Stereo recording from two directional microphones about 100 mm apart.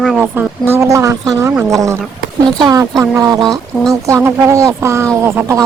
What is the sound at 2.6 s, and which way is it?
Music, 40° right (ahead or behind).